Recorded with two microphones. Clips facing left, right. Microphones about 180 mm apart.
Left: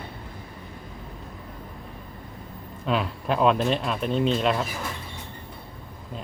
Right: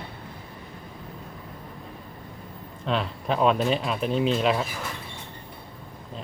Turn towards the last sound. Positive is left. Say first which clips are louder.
# even
turn(degrees=-5)  # may be behind; listen again after turning